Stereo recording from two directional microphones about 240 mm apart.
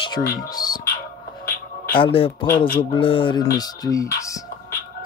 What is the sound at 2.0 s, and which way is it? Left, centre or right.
Speech, left.